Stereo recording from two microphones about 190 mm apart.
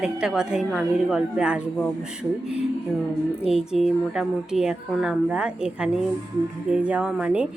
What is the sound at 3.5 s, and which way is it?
Speech, centre (ahead or behind).